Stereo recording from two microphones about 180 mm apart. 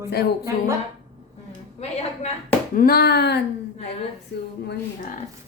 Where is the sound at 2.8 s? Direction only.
55° left (ahead or behind).